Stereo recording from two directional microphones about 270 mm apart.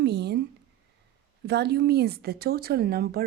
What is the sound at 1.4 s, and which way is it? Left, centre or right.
Speech, right.